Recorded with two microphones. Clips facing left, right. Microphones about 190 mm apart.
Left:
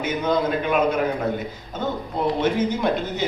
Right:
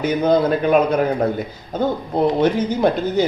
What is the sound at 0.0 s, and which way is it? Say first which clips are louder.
Speech: right 6 dB; 35° right (ahead or behind).